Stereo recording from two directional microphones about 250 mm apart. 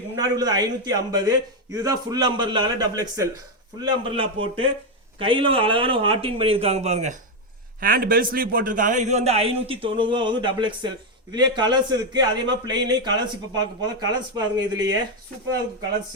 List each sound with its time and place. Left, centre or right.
0.2 s a man's voice: centre